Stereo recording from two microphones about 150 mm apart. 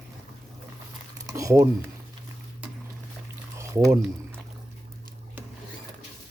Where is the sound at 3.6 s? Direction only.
20° right (ahead or behind).